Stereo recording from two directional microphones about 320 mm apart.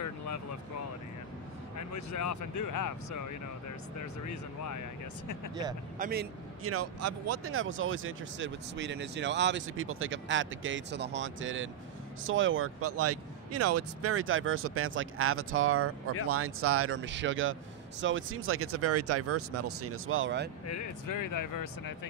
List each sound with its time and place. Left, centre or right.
0.0 s vehicle: left
1.8 s speech: left
5.9 s speech: right
6.6 s speech: right
20.6 s speech: left